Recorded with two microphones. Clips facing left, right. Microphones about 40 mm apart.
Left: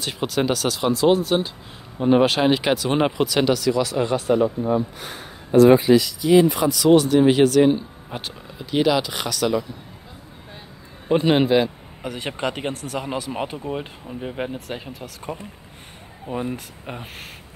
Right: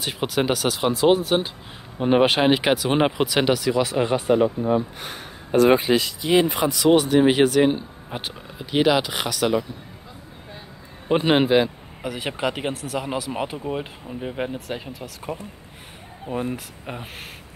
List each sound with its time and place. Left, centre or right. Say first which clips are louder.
0.0 s speech: even; centre
5.6 s speech: left 4 dB; right
6.9 s speech: left 2 dB; centre
11.1 s a man's voice: left 1 dB; centre
12.0 s speech: right 1 dB; centre